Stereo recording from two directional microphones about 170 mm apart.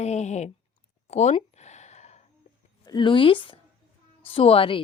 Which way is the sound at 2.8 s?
25° left (ahead or behind).